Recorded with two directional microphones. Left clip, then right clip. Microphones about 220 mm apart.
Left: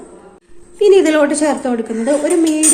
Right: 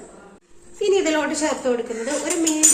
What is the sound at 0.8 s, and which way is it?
Speech, 45° left (ahead or behind).